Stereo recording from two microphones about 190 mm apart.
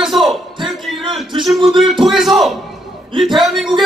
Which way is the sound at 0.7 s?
Centre (ahead or behind).